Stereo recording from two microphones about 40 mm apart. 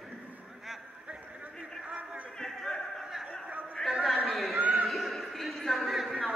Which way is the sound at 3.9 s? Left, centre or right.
Centre.